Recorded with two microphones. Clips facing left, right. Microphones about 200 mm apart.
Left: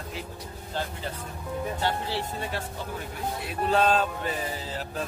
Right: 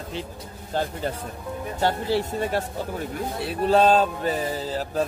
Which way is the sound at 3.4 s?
35° right (ahead or behind).